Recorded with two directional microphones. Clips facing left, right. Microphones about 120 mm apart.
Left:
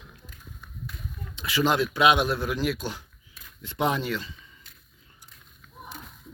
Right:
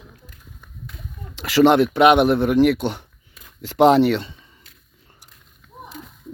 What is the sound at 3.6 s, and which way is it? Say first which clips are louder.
Speech: right 13 dB; 85° right.